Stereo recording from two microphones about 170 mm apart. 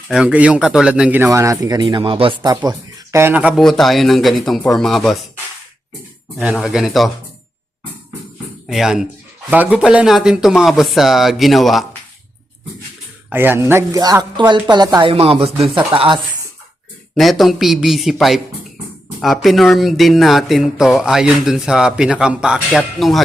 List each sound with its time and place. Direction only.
0.1 s speech: 5° right (ahead or behind)
6.4 s speech: 5° right (ahead or behind)
8.6 s speech: centre (ahead or behind)
13.3 s speech: 10° right (ahead or behind)
15.1 s speech: 35° right (ahead or behind)
17.2 s speech: centre (ahead or behind)